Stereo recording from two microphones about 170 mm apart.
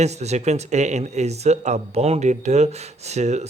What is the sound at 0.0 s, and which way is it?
Speech, 40° right (ahead or behind).